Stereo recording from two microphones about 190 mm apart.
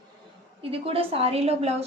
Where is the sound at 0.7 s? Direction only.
30° right (ahead or behind).